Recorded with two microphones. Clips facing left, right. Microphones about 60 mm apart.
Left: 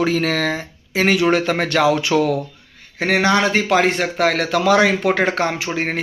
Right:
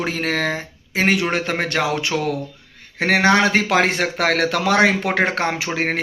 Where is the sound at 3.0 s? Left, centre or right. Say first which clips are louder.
Right 1 dB; right.